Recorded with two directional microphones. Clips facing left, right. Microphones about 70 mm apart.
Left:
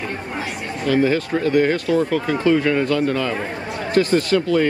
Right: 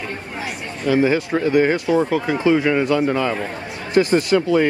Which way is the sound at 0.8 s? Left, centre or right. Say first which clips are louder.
Right 1 dB; centre.